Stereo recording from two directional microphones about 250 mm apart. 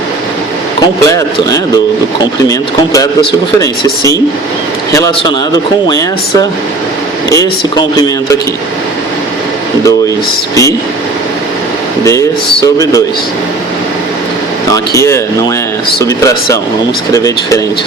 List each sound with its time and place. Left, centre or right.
1.0 s a man's voice: centre
10.5 s speech: centre
12.6 s speech: centre
14.7 s speech: centre